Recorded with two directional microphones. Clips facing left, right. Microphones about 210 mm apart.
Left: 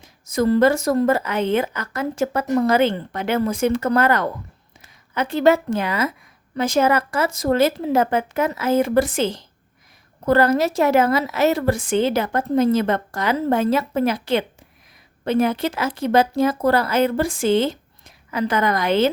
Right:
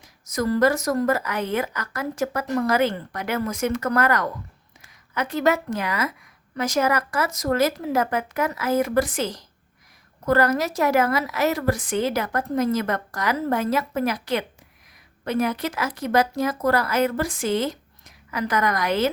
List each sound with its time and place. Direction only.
0.0 s a woman's voice: 25° left (ahead or behind)